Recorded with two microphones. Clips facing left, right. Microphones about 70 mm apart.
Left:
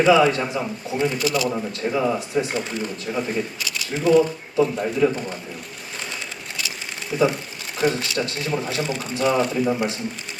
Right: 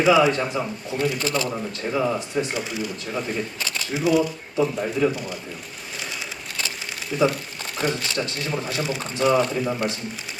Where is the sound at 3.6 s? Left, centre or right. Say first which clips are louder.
Even; right.